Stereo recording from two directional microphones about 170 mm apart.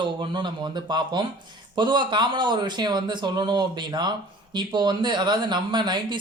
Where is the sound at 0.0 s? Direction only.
30° right (ahead or behind).